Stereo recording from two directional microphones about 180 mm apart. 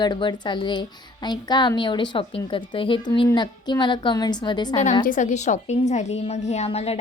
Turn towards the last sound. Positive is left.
turn(degrees=35)  # may be behind; listen again after turning